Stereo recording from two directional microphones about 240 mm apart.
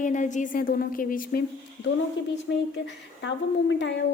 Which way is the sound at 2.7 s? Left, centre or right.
Left.